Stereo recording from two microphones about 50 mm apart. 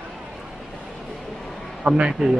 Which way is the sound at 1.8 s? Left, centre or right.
Centre.